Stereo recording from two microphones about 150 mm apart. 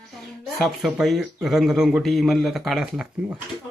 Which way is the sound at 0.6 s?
Centre (ahead or behind).